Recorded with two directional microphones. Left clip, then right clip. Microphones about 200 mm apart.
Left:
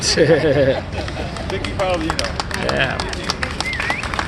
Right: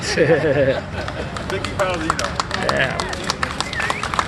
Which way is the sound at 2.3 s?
15° right (ahead or behind).